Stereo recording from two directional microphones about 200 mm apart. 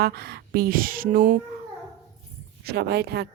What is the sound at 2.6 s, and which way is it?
Speech, 55° right (ahead or behind).